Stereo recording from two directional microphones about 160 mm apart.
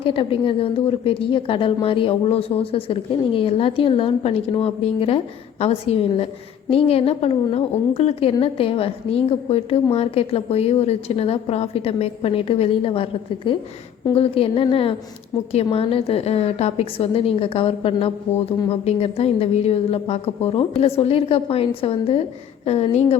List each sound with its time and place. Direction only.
0.0 s a woman's voice: 35° left (ahead or behind)